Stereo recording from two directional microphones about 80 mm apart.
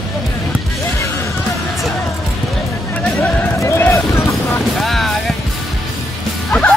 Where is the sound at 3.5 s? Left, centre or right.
Left.